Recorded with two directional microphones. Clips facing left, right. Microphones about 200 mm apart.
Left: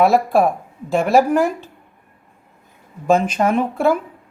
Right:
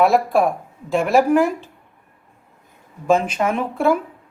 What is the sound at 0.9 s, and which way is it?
Speech, 40° left (ahead or behind).